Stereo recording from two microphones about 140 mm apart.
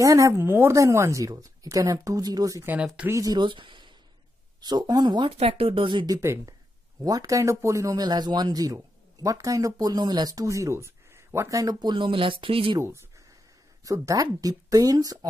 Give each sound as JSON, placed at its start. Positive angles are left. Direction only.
{"t": 0.0, "sound": "speech", "side_deg": -25}
{"t": 2.7, "sound": "speech", "side_deg": -5}
{"t": 3.1, "sound": "speech", "side_deg": -25}
{"t": 5.4, "sound": "speech", "side_deg": -45}
{"t": 6.2, "sound": "speech", "side_deg": -20}
{"t": 12.7, "sound": "speech", "side_deg": -20}